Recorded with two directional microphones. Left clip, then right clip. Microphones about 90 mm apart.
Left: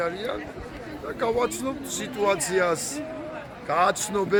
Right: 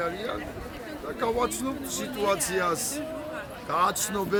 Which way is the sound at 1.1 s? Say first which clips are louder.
Left 2 dB; 20° right (ahead or behind).